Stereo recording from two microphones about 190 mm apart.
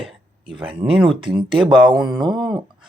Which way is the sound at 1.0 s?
25° right (ahead or behind).